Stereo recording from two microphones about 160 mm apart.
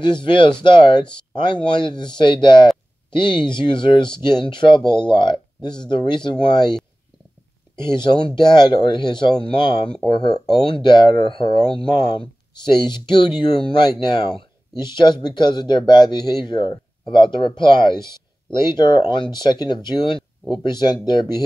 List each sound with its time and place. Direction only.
0.0 s speech: 30° left (ahead or behind)
7.8 s speech: 30° left (ahead or behind)